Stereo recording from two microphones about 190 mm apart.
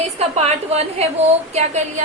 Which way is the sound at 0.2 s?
35° right (ahead or behind).